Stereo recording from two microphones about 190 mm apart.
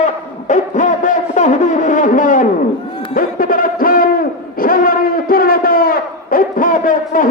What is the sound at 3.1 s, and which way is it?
Hoot, 50° left (ahead or behind).